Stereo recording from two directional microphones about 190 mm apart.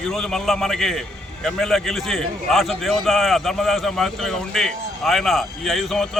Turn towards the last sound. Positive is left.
turn(degrees=0)  # may be behind; listen again after turning